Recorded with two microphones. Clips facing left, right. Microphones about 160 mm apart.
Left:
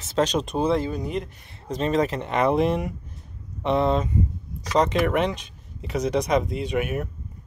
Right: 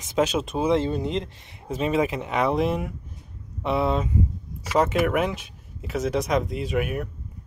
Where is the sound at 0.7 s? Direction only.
25° right (ahead or behind).